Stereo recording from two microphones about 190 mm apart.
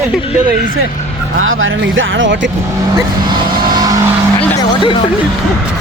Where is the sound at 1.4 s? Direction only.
90° right; by 2.5 s 75° right (ahead or behind).